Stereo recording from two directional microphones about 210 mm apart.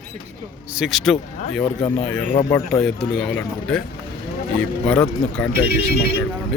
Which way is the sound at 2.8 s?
5° left (ahead or behind).